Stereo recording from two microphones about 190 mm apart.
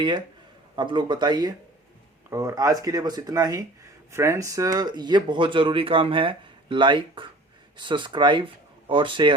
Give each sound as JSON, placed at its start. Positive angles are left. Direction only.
{"t": 0.8, "sound": "speech", "side_deg": -25}